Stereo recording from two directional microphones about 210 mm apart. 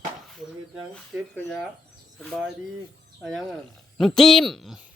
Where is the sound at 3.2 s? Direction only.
Centre (ahead or behind).